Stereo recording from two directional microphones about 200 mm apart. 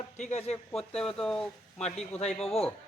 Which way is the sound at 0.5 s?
5° left (ahead or behind).